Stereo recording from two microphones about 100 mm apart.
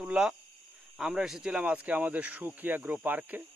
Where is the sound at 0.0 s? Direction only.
10° right (ahead or behind).